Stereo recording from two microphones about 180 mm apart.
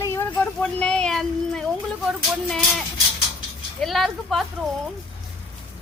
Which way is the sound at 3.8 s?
Centre (ahead or behind).